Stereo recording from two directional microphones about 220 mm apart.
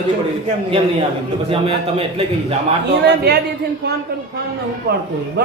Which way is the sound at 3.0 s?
50° right (ahead or behind).